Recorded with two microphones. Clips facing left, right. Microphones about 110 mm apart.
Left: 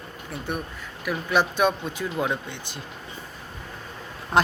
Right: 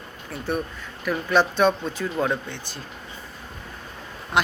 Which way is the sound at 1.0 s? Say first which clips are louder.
Right 2 dB; 10° left (ahead or behind).